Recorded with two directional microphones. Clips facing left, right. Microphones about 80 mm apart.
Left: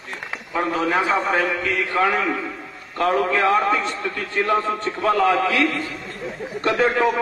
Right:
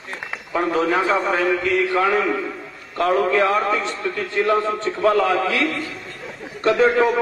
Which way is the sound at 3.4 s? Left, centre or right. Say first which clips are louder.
Left 1 dB; left.